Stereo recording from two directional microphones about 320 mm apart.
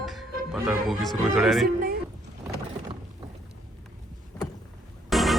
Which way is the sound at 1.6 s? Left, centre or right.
Right.